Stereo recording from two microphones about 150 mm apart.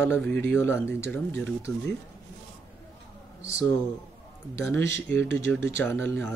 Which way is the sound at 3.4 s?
20° left (ahead or behind).